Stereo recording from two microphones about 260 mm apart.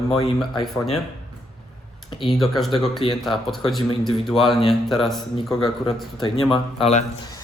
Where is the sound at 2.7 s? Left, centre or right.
Centre.